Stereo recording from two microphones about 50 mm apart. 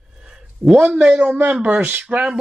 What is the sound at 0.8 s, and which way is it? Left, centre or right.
Speech, centre.